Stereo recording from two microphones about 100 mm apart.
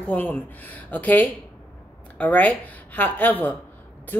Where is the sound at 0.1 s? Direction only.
15° left (ahead or behind).